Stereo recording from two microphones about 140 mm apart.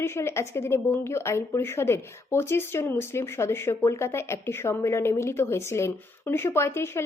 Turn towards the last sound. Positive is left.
turn(degrees=20)  # may be behind; listen again after turning